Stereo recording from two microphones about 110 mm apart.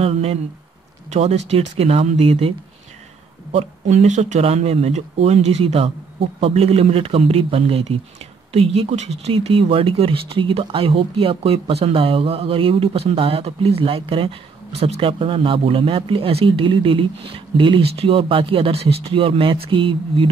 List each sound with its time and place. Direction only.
0.0 s speech: 60° right (ahead or behind)
1.1 s speech: 90° right; by 2.5 s 60° right (ahead or behind)
3.5 s speech: 85° right; by 20.2 s 50° right (ahead or behind)